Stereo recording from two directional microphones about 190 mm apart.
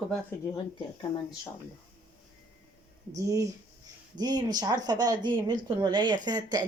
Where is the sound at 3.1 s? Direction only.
15° right (ahead or behind).